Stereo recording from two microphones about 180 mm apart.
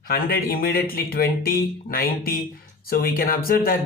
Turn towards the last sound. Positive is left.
turn(degrees=55)  # may be behind; listen again after turning